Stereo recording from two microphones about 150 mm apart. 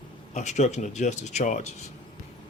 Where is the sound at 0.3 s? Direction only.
50° left (ahead or behind).